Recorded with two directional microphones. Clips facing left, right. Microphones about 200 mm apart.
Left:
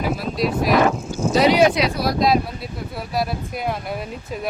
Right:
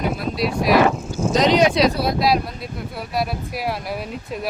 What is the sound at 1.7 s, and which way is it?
Speech, 30° right (ahead or behind).